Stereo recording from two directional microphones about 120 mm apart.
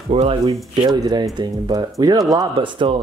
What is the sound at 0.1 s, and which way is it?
Speech, 55° right (ahead or behind).